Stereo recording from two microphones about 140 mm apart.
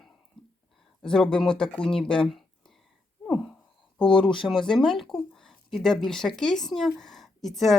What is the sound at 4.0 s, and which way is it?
Speech, 35° left (ahead or behind).